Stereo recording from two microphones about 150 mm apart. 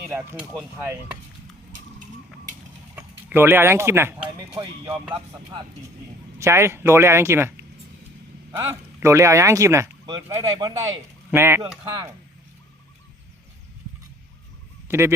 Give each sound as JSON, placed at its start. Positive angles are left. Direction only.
{"t": 0.3, "sound": "speech", "side_deg": -10}
{"t": 2.9, "sound": "speech", "side_deg": -10}
{"t": 4.4, "sound": "speech", "side_deg": -35}
{"t": 6.4, "sound": "speech", "side_deg": -15}
{"t": 8.5, "sound": "speech", "side_deg": -15}
{"t": 14.8, "sound": "speech", "side_deg": -15}